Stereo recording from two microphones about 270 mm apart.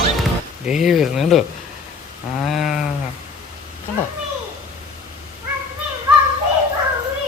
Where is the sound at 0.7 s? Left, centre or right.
Centre.